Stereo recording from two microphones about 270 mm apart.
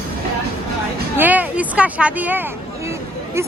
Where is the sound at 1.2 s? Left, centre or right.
Centre.